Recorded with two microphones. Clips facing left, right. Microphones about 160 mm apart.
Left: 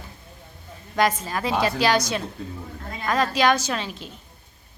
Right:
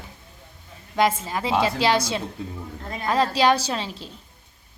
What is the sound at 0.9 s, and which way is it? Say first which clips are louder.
A woman's voice: right 1 dB; 25° right (ahead or behind).